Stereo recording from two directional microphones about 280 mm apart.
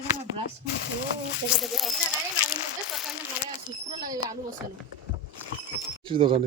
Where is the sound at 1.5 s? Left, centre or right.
Centre.